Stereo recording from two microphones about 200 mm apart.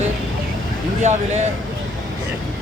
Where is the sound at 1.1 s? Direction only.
35° right (ahead or behind).